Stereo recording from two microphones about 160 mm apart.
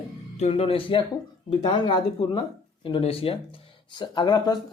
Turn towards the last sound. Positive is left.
turn(degrees=25)  # may be behind; listen again after turning